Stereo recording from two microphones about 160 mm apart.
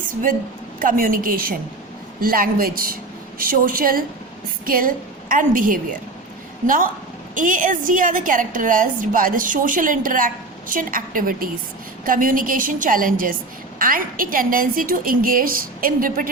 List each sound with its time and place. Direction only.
0.1 s a woman's voice: 60° right (ahead or behind)